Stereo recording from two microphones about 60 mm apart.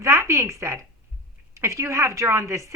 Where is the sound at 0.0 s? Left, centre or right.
Right.